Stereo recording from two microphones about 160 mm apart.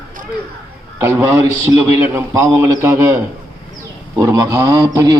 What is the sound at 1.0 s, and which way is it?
A man's voice, 15° right (ahead or behind).